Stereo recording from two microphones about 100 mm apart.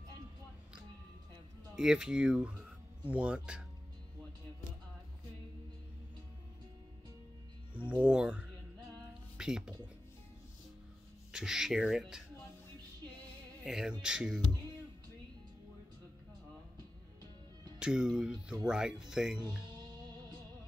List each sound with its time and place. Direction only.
1.8 s speech: 5° right (ahead or behind)
7.9 s speech: 10° right (ahead or behind)
11.3 s speech: 5° right (ahead or behind)
13.7 s speech: 5° right (ahead or behind)
17.7 s speech: 10° right (ahead or behind)